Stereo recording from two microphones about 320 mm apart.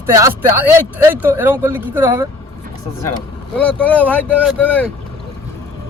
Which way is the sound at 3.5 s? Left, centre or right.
Centre.